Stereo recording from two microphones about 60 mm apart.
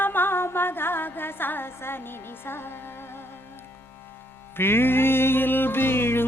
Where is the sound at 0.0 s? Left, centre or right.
Left.